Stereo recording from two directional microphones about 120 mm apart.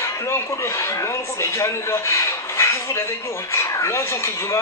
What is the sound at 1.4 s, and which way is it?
A man's voice, 25° left (ahead or behind).